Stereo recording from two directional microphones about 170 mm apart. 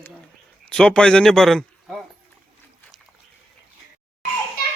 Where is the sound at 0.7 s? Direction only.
5° left (ahead or behind).